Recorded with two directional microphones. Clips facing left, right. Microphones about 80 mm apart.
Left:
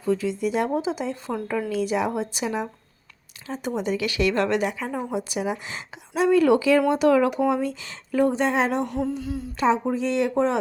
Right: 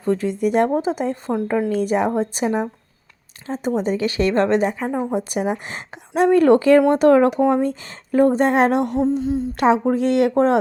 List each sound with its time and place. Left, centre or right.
0.0 s a woman's voice: right
8.9 s a sound: right
9.6 s speech: right